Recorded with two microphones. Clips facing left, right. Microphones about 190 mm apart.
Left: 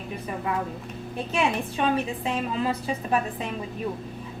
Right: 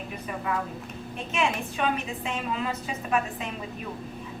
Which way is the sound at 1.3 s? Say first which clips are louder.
Left 2 dB; 35° left (ahead or behind).